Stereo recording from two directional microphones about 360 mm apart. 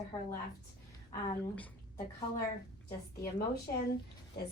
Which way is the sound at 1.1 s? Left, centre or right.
Centre.